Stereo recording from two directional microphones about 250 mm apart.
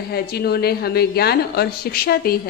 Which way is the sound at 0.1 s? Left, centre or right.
Left.